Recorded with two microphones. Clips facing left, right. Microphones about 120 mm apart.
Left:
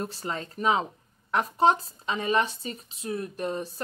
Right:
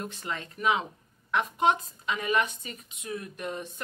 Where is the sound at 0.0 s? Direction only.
35° left (ahead or behind).